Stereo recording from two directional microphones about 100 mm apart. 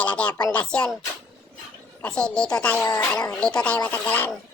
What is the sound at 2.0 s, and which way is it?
Speech, 10° left (ahead or behind).